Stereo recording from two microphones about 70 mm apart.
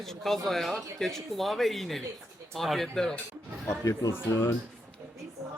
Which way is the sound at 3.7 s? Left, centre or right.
Left.